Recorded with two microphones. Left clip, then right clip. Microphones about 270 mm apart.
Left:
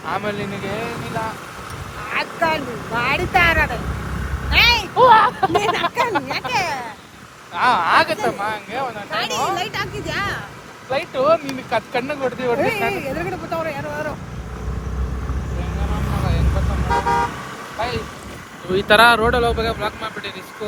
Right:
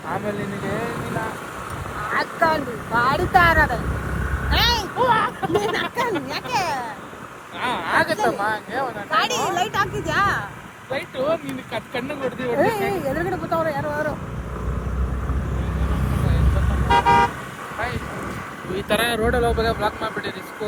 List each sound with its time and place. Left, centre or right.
2.0 s speech: centre
4.4 s vehicle: centre
4.9 s speech: left
5.7 s speech: centre
7.5 s speech: left
8.0 s speech: centre
9.1 s a woman's voice: centre
10.9 s speech: left
12.5 s speech: centre
18.8 s speech: left
19.3 s speech: centre